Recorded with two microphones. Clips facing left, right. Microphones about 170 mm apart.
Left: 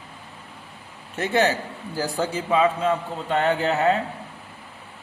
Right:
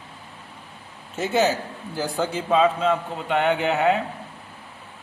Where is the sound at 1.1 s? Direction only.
5° right (ahead or behind).